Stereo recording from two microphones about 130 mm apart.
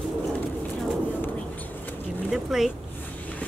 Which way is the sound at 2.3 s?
5° right (ahead or behind).